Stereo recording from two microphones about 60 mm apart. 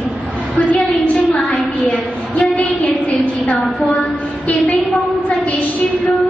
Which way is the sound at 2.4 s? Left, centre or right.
Left.